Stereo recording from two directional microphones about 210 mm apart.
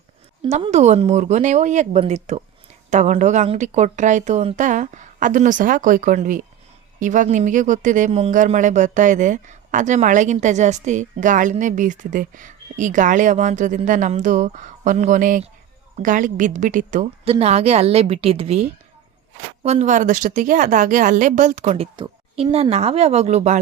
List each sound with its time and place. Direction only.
0.4 s a woman's voice: 30° right (ahead or behind)
19.6 s a woman's voice: 35° right (ahead or behind)